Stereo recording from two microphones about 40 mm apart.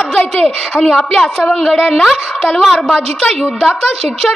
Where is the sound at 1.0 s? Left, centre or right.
Centre.